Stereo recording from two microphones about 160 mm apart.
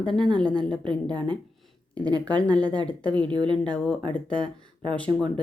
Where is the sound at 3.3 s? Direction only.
30° right (ahead or behind).